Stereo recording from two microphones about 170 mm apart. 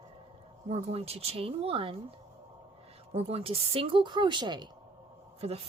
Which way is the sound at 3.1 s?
35° right (ahead or behind).